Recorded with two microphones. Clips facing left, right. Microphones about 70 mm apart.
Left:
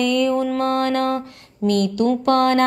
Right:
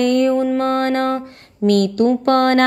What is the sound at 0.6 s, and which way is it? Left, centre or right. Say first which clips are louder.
Mantra: right 2 dB; right.